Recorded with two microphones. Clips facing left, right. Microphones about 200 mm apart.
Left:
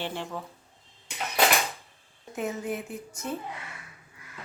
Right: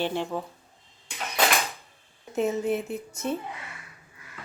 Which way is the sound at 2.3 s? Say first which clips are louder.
Right 6 dB; 25° right (ahead or behind).